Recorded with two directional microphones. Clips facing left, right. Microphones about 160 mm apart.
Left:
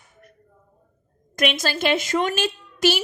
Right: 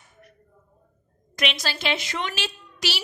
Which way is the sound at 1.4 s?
50° left (ahead or behind).